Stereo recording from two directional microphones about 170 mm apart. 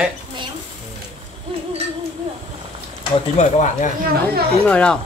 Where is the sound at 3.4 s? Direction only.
45° left (ahead or behind).